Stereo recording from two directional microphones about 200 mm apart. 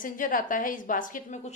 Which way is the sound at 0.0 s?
45° left (ahead or behind).